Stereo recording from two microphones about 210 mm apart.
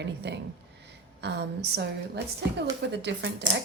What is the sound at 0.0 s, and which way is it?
A woman's voice, 55° right (ahead or behind).